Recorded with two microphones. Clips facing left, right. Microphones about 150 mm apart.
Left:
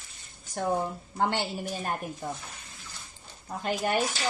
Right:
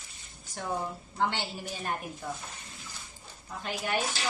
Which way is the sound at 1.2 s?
45° left (ahead or behind).